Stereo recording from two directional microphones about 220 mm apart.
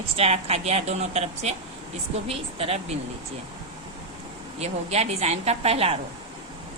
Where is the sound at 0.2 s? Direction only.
30° right (ahead or behind).